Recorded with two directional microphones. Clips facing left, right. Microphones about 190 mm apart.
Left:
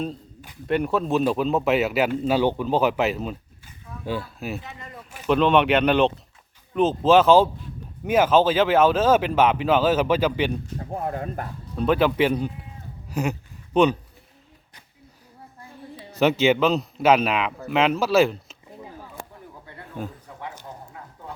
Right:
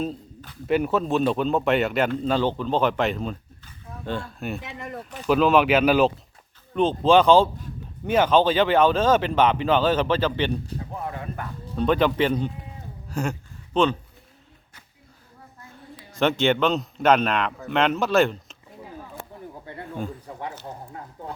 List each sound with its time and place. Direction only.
0.7 s speech: centre (ahead or behind)
4.6 s speech: 65° right (ahead or behind)
5.1 s speech: centre (ahead or behind)
10.8 s speech: 45° left (ahead or behind)
11.8 s speech: 5° left (ahead or behind)
13.1 s a sound: 10° left (ahead or behind)
13.7 s speech: 15° left (ahead or behind)
16.1 s speech: 5° left (ahead or behind)
20.0 s speech: centre (ahead or behind)
20.7 s a sound: 30° right (ahead or behind)